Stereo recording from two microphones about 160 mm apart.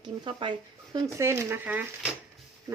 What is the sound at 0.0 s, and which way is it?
Speech, 30° right (ahead or behind).